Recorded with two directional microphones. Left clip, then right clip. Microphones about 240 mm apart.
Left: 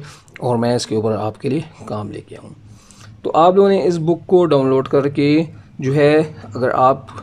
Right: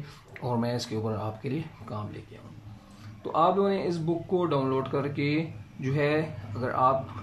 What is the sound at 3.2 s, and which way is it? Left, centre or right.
Speech, left.